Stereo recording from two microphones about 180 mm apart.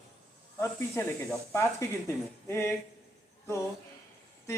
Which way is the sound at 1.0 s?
15° left (ahead or behind).